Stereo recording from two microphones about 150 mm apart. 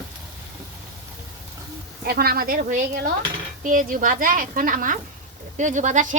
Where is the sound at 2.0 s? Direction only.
90° right.